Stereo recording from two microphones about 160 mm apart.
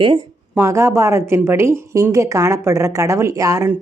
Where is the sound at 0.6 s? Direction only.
15° right (ahead or behind).